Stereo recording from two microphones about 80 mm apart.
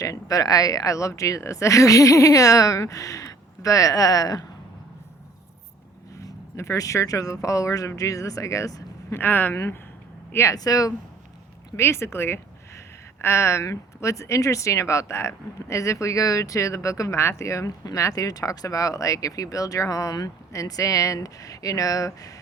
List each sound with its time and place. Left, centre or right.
0.0 s speech: left
6.1 s speech: left
9.1 s speech: left
10.3 s speech: left
11.8 s speech: left